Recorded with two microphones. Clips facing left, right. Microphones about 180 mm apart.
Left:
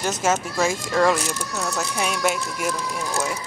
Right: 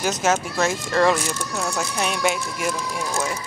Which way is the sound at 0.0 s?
Centre (ahead or behind).